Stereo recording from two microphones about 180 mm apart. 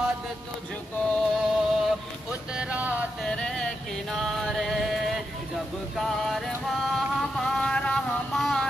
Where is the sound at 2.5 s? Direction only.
10° right (ahead or behind).